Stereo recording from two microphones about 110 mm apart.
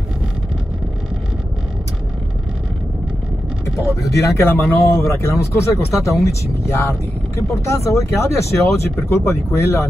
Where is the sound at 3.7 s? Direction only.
25° left (ahead or behind).